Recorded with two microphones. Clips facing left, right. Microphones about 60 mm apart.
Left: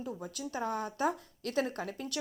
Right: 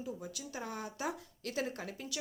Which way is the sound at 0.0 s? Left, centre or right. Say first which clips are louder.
Left 3 dB; left.